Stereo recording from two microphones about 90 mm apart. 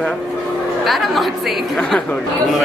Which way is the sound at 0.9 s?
Centre (ahead or behind).